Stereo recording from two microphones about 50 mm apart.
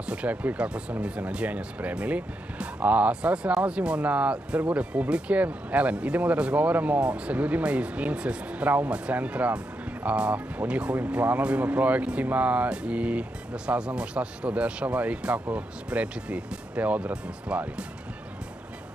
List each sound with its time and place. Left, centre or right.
0.0 s speech: right